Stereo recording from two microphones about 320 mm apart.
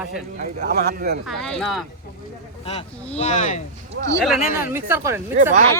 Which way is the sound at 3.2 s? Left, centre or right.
Left.